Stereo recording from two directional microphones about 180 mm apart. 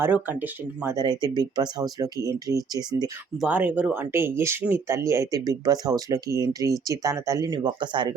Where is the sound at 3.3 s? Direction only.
5° right (ahead or behind).